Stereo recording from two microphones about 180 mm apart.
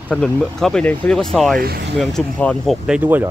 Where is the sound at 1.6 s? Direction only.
60° right (ahead or behind).